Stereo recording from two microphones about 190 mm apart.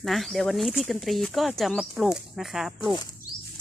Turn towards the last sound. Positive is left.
turn(degrees=20)  # may be behind; listen again after turning